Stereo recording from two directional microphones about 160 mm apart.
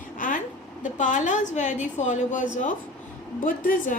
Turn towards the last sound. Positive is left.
turn(degrees=55)  # may be behind; listen again after turning